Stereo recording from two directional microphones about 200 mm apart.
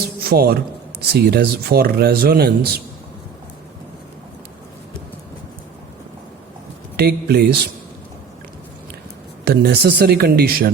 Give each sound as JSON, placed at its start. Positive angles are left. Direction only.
{"t": 0.3, "sound": "speech", "side_deg": -50}
{"t": 6.9, "sound": "speech", "side_deg": -55}
{"t": 9.4, "sound": "speech", "side_deg": -55}